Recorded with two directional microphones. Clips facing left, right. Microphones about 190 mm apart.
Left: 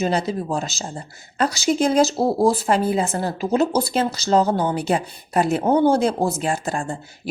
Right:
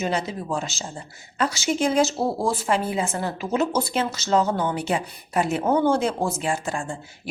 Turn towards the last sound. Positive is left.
turn(degrees=40)  # may be behind; listen again after turning